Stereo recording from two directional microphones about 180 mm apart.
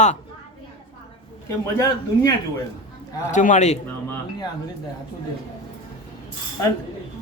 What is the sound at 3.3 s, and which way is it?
Speech, 45° left (ahead or behind).